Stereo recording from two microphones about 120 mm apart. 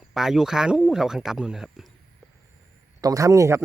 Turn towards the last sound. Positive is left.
turn(degrees=-25)  # may be behind; listen again after turning